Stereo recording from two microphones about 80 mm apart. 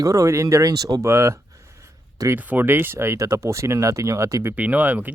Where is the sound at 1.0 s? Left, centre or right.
Right.